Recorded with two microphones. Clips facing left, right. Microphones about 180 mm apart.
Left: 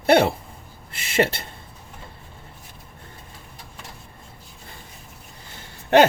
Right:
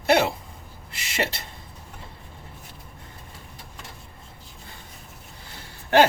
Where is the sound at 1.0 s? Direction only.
55° left (ahead or behind).